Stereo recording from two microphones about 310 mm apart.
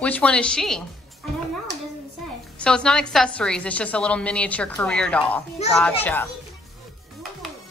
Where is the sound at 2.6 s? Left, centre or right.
Centre.